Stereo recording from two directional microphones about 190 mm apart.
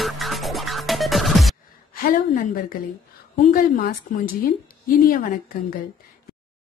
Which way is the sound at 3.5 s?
45° left (ahead or behind).